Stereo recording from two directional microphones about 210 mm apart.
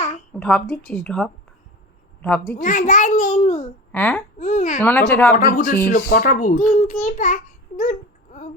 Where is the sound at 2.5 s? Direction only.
35° left (ahead or behind).